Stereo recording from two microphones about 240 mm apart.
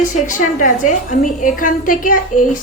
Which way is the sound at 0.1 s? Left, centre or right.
Left.